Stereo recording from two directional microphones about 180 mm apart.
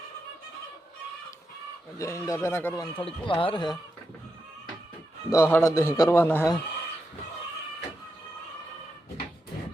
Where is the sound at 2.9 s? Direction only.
30° left (ahead or behind).